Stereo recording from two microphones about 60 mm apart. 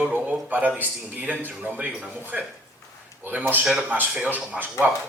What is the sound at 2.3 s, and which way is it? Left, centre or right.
Speech, centre.